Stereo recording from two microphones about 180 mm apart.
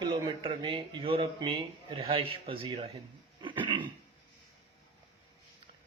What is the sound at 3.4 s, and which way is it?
Dog, 25° right (ahead or behind).